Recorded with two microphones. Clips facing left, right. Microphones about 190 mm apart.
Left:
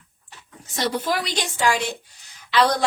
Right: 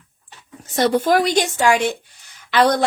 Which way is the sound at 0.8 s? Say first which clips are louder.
Right 8 dB; 50° right (ahead or behind).